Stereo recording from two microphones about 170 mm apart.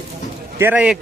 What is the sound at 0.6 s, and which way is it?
Speech, 10° right (ahead or behind).